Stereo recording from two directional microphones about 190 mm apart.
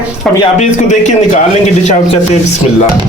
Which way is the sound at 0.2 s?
5° left (ahead or behind).